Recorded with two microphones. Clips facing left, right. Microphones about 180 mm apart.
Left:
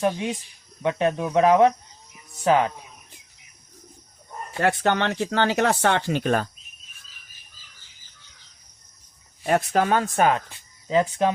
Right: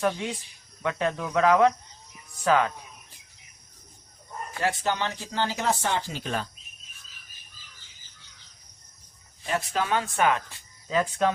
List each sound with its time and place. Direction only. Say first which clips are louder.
0.0 s speech: left 3 dB; 20° left (ahead or behind)
4.6 s speech: left 6 dB; 65° left (ahead or behind)
9.5 s speech: left 6 dB; 50° left (ahead or behind); by 10.4 s 35° left (ahead or behind)
10.8 s speech: left 4 dB; 20° left (ahead or behind)